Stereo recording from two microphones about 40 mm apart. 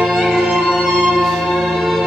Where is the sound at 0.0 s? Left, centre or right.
Centre.